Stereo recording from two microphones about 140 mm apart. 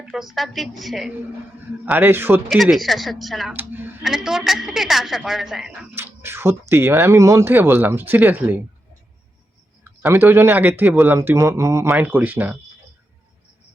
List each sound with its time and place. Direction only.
0.1 s a woman's voice: centre (ahead or behind)
1.8 s speech: 10° right (ahead or behind)
2.5 s a woman's voice: centre (ahead or behind)
3.5 s speech: 15° right (ahead or behind)
4.0 s a woman's voice: 5° right (ahead or behind)
6.0 s speech: 15° right (ahead or behind)
10.0 s speech: 15° right (ahead or behind)